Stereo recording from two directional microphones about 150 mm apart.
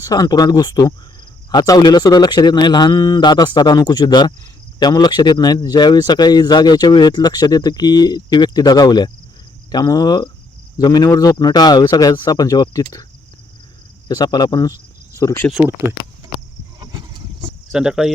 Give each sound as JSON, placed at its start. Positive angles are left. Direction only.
{"t": 0.0, "sound": "speech", "side_deg": 25}
{"t": 14.1, "sound": "speech", "side_deg": 25}
{"t": 15.5, "sound": "speech", "side_deg": -10}
{"t": 16.8, "sound": "vehicle", "side_deg": -30}
{"t": 17.7, "sound": "speech", "side_deg": -5}